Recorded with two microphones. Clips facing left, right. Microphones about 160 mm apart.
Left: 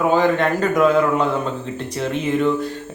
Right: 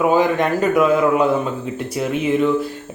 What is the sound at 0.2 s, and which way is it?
Speech, 10° right (ahead or behind).